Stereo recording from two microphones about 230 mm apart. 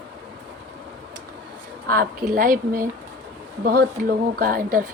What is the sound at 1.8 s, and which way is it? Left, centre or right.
Speech, right.